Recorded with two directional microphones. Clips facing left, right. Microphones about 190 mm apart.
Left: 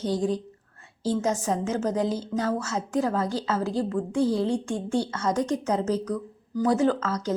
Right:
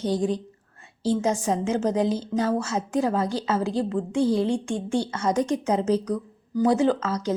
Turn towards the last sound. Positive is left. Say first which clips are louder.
# right 1 dB
turn(degrees=-10)  # may be behind; listen again after turning